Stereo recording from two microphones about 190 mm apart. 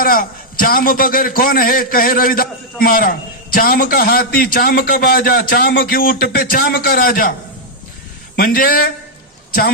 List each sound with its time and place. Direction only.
0.0 s a man's voice: 50° left (ahead or behind)
8.4 s a man's voice: 50° left (ahead or behind)